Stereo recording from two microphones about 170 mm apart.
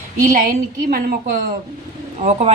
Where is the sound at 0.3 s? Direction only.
55° right (ahead or behind).